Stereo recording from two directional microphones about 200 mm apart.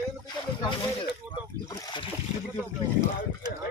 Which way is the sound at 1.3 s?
20° left (ahead or behind).